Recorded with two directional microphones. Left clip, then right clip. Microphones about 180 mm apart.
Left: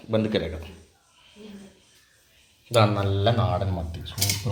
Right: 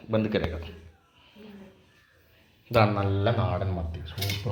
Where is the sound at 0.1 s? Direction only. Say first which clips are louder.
Left 2 dB; 10° left (ahead or behind).